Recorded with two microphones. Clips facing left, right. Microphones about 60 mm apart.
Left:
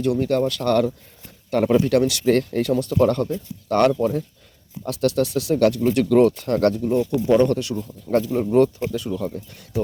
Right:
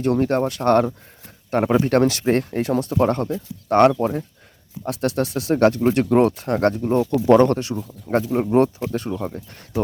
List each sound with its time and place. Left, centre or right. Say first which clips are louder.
0.0 s speech: right 1 dB; right
1.9 s speech: even; right
6.9 s speech: right 6 dB; right
7.7 s speech: left 1 dB; right
8.9 s speech: even; right